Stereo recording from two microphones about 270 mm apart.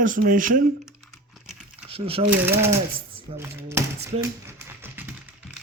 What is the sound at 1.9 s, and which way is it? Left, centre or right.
Speech, right.